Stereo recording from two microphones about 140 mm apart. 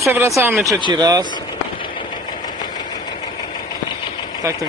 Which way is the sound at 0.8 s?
30° right (ahead or behind).